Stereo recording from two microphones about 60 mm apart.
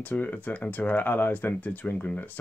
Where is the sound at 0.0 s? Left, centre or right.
Left.